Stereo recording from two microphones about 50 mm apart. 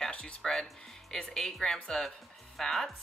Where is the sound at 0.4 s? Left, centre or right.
Centre.